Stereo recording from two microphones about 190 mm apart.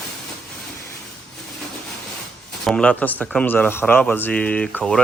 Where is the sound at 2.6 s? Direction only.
5° left (ahead or behind).